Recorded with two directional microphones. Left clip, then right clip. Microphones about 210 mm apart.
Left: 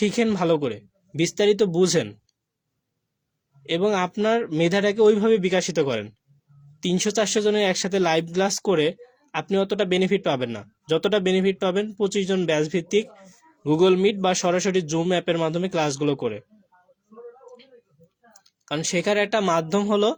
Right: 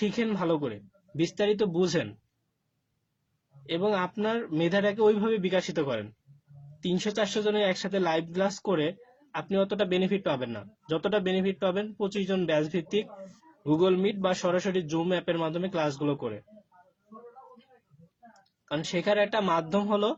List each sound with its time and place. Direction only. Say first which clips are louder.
0.0 s speech: left 7 dB; 45° left (ahead or behind)
3.7 s speech: left 5 dB; 45° left (ahead or behind)
18.6 s speech: left 5 dB; 45° left (ahead or behind)